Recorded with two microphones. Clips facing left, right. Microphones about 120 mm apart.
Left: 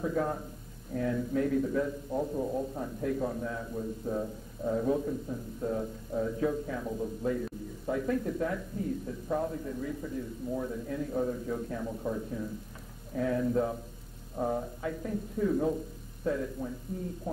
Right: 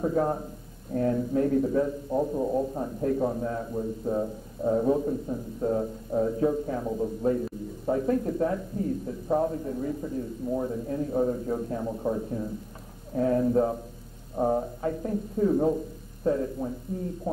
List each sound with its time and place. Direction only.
0.0 s a man's voice: 30° right (ahead or behind)